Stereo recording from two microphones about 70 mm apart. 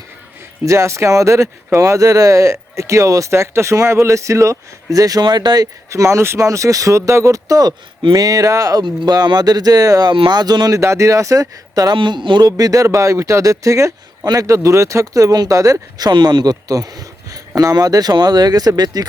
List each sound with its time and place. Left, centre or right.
0.6 s speech: right
5.9 s speech: right
10.7 s speech: right
16.0 s speech: right